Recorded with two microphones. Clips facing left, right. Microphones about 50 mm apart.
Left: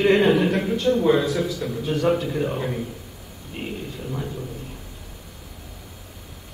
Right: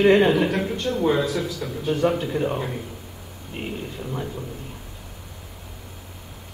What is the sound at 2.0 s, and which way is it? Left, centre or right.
Speech, centre.